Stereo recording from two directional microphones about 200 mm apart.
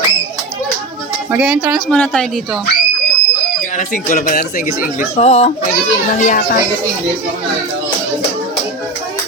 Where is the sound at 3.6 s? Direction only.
40° left (ahead or behind).